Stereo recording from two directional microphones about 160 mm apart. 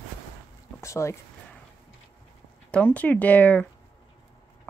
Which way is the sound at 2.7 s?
10° left (ahead or behind).